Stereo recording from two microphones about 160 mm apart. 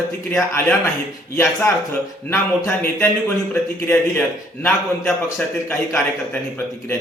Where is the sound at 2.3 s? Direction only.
15° left (ahead or behind).